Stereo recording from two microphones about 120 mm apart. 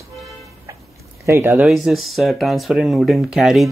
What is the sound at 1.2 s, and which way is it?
Speech, 25° right (ahead or behind).